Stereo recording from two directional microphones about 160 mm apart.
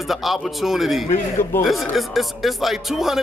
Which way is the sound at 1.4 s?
15° left (ahead or behind).